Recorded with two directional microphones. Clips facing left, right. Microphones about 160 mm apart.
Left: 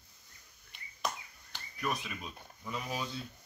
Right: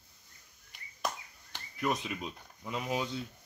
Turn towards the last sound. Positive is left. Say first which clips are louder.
# right 4 dB
turn(degrees=-20)  # may be behind; listen again after turning